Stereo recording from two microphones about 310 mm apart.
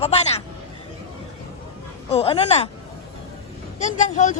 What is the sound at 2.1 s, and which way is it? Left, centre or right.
Speech, centre.